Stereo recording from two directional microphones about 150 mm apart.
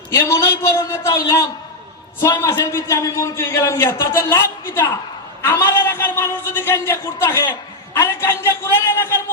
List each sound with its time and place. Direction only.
0.1 s a man's voice: 20° left (ahead or behind)